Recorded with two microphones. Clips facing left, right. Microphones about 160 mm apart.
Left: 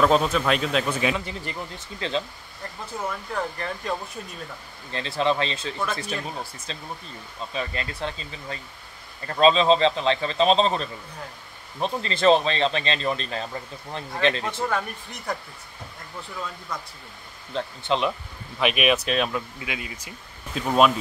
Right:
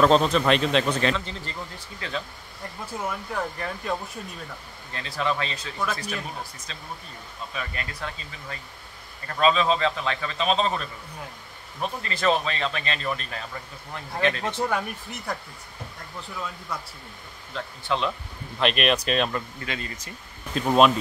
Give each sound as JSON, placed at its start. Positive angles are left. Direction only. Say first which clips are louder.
{"t": 0.0, "sound": "speech", "louder": "right 1 dB", "side_deg": 5}
{"t": 2.0, "sound": "speech", "louder": "left 5 dB", "side_deg": 25}
{"t": 2.9, "sound": "speech", "louder": "left 1 dB", "side_deg": -10}
{"t": 4.9, "sound": "speech", "louder": "left 4 dB", "side_deg": 25}
{"t": 14.7, "sound": "speech", "louder": "even", "side_deg": -5}
{"t": 17.6, "sound": "speech", "louder": "left 3 dB", "side_deg": 20}
{"t": 18.6, "sound": "speech", "louder": "left 1 dB", "side_deg": 5}